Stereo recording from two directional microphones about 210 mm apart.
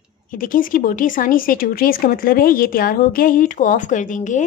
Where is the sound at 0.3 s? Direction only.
40° left (ahead or behind).